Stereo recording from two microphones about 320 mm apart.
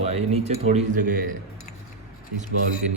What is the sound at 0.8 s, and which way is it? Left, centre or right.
Speech, right.